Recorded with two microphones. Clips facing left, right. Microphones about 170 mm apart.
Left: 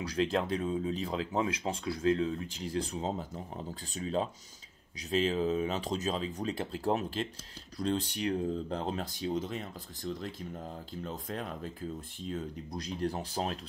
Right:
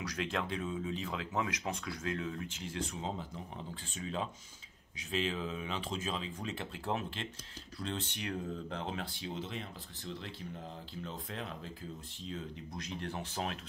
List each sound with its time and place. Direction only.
0.0 s speech: 30° left (ahead or behind)